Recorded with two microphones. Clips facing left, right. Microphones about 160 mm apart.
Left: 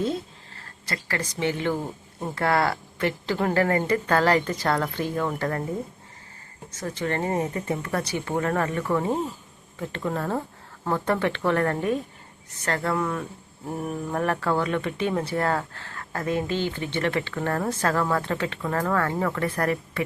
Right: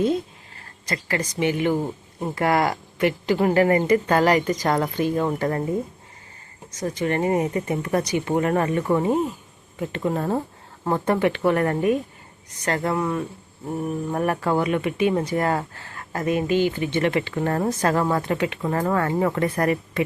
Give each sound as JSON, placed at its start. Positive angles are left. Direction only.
{"t": 0.0, "sound": "speech", "side_deg": -15}
{"t": 6.7, "sound": "speech", "side_deg": -15}